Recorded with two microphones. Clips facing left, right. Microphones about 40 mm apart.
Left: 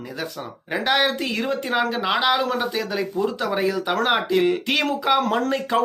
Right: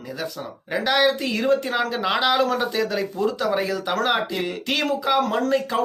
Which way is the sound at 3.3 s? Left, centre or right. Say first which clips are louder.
Even; left.